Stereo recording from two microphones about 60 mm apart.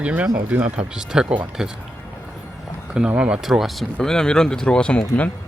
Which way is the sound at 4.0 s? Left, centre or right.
Centre.